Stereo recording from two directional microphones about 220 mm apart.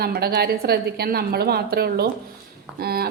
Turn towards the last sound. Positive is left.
turn(degrees=-45)  # may be behind; listen again after turning